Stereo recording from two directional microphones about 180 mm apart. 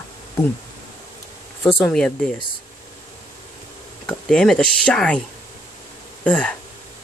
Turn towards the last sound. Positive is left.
turn(degrees=10)  # may be behind; listen again after turning